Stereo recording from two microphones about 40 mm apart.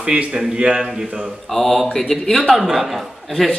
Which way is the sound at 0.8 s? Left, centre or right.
Centre.